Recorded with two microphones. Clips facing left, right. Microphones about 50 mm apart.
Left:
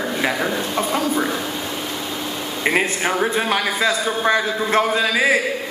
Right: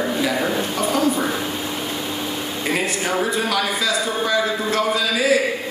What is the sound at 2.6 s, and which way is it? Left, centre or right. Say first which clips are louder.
A man's voice: left 4 dB; left.